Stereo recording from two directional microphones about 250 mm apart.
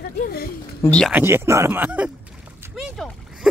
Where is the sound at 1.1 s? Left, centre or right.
Centre.